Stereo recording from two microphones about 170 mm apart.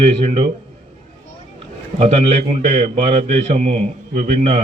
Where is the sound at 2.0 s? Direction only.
40° right (ahead or behind).